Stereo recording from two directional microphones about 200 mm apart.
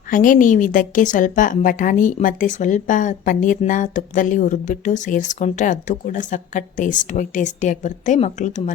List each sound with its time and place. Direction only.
0.1 s a woman's voice: 40° left (ahead or behind)